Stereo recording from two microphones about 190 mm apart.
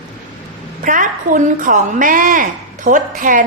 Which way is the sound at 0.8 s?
45° right (ahead or behind).